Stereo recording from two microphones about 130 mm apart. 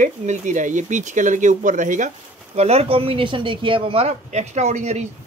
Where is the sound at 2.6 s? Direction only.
50° right (ahead or behind).